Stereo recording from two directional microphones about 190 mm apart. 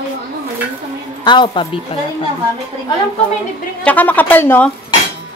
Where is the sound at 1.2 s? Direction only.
25° left (ahead or behind).